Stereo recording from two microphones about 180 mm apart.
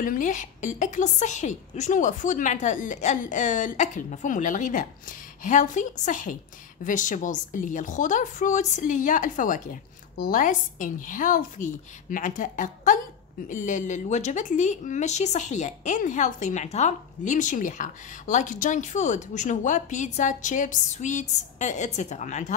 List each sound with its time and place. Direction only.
0.0 s a woman's voice: 50° left (ahead or behind)